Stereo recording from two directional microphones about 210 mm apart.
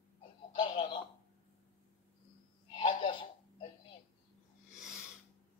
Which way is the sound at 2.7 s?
25° left (ahead or behind).